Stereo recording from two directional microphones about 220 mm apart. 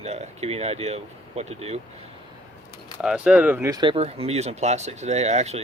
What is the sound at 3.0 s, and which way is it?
Speech, 5° right (ahead or behind).